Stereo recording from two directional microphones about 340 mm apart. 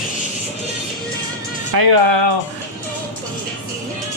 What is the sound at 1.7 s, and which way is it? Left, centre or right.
Speech, right.